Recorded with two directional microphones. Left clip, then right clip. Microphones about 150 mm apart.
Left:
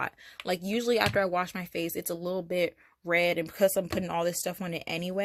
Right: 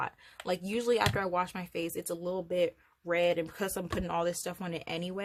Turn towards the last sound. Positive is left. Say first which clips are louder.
# left 4 dB
turn(degrees=25)  # may be behind; listen again after turning